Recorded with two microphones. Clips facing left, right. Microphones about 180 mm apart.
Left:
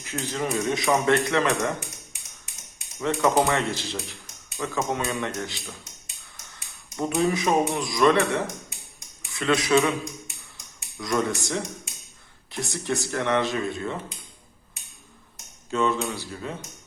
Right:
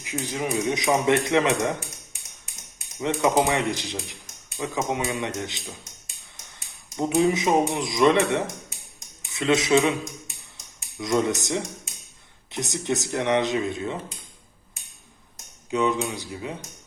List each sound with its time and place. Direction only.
0.0 s a man's voice: 15° right (ahead or behind)
3.0 s a man's voice: 20° right (ahead or behind)
6.9 s speech: 20° right (ahead or behind)
10.9 s speech: 20° right (ahead or behind)
15.7 s a man's voice: 15° right (ahead or behind)